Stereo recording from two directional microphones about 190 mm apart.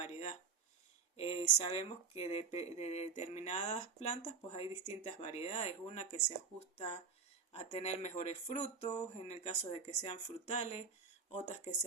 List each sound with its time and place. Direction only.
0.0 s a sound: 35° left (ahead or behind)
1.1 s speech: 35° left (ahead or behind)
7.5 s speech: 35° left (ahead or behind)